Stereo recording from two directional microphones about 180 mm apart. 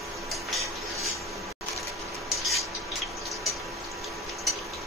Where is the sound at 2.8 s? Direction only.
Centre (ahead or behind).